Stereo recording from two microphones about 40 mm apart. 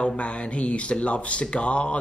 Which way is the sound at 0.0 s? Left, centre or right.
Left.